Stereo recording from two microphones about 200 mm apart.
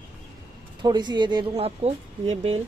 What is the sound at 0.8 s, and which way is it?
Speech, 20° right (ahead or behind).